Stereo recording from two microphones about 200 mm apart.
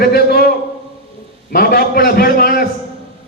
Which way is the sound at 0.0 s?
50° left (ahead or behind).